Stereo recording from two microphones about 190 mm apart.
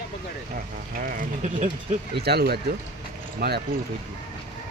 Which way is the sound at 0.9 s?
45° right (ahead or behind).